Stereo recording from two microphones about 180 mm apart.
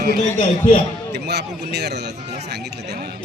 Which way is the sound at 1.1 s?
70° right (ahead or behind).